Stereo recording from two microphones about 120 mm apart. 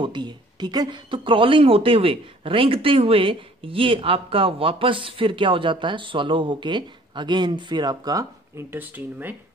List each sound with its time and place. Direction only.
0.0 s speech: 40° right (ahead or behind)
8.7 s speech: 15° right (ahead or behind)